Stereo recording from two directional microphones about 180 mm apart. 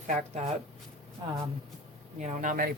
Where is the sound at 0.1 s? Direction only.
45° right (ahead or behind).